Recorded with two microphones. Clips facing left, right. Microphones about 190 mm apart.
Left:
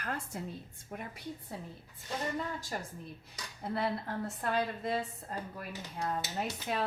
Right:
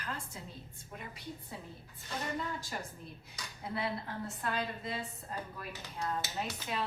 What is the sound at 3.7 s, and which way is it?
Speech, 40° left (ahead or behind).